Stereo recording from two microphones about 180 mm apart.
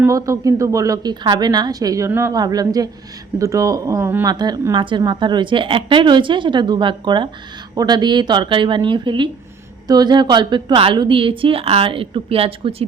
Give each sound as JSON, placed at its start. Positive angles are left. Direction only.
{"t": 0.0, "sound": "a woman's voice", "side_deg": -15}